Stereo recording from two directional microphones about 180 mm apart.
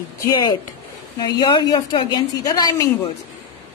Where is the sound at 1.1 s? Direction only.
20° left (ahead or behind).